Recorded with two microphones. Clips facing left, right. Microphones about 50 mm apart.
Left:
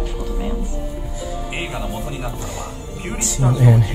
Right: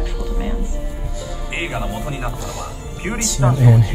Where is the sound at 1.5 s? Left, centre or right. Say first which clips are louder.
Right 5 dB; right.